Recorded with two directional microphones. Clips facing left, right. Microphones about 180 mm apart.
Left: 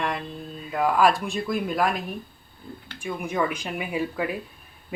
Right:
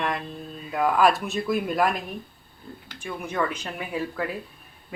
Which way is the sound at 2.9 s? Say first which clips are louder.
Left 2 dB; 10° left (ahead or behind).